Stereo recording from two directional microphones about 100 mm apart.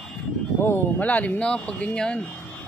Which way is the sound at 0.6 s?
20° left (ahead or behind).